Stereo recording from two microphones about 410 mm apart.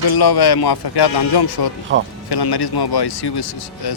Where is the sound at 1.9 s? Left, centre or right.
Right.